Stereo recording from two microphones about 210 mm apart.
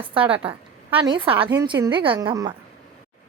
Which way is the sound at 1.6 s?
20° right (ahead or behind).